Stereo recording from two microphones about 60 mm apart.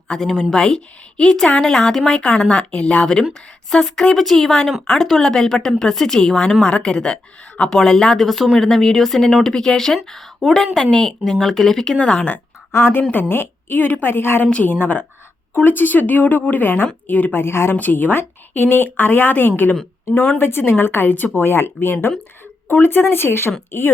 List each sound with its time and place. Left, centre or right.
0.1 s speech: centre
12.7 s a woman's voice: left
14.4 s a woman's voice: left
17.3 s a woman's voice: left
17.7 s a woman's voice: left